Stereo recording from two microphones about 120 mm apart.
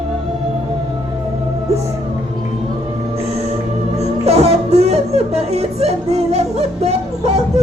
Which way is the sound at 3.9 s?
65° right (ahead or behind).